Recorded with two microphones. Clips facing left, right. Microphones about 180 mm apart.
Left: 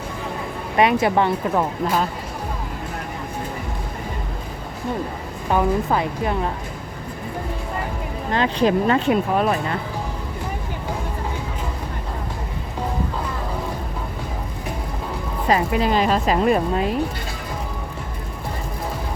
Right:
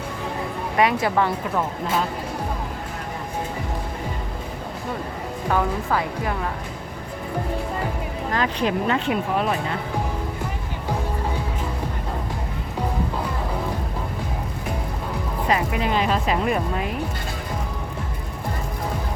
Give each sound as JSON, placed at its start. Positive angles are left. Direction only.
{"t": 0.8, "sound": "a woman's voice", "side_deg": 20}
{"t": 5.5, "sound": "a woman's voice", "side_deg": 20}
{"t": 8.3, "sound": "speech", "side_deg": 30}
{"t": 15.4, "sound": "speech", "side_deg": 35}